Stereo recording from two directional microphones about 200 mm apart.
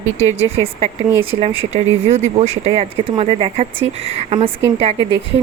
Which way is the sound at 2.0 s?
35° right (ahead or behind).